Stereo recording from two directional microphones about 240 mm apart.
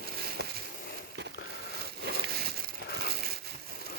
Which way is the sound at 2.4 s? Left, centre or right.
Right.